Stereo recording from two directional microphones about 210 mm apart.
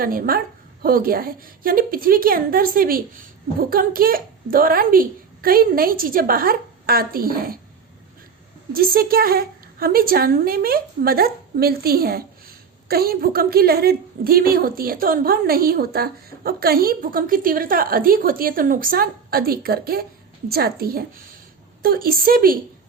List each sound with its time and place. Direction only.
0.0 s a woman's voice: 45° right (ahead or behind)
8.7 s a woman's voice: 45° right (ahead or behind)